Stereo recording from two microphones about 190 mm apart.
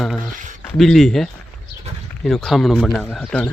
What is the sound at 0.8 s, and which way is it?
A man's voice, centre (ahead or behind).